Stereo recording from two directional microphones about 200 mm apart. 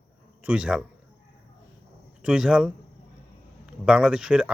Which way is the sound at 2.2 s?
5° right (ahead or behind).